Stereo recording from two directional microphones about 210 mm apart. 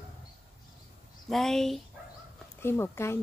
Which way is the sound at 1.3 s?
Centre (ahead or behind).